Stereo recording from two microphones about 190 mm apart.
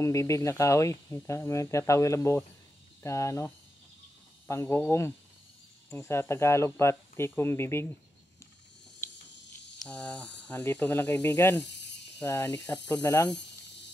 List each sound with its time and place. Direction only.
0.0 s speech: 15° left (ahead or behind)
9.8 s speech: 5° left (ahead or behind)